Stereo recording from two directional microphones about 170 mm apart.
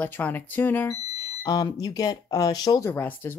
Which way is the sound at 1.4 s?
20° left (ahead or behind).